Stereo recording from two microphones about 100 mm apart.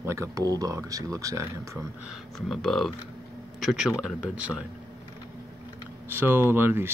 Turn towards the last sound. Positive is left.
turn(degrees=-20)  # may be behind; listen again after turning